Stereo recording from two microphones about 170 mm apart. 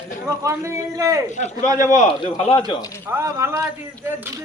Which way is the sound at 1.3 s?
45° left (ahead or behind).